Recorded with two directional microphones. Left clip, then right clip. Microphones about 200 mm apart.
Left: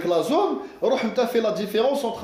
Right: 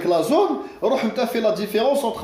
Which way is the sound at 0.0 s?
30° left (ahead or behind).